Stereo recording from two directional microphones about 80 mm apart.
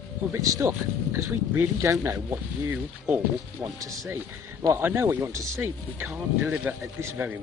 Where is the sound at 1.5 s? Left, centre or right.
Right.